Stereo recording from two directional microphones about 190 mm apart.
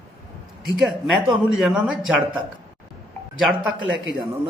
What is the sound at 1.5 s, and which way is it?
Speech, 5° right (ahead or behind).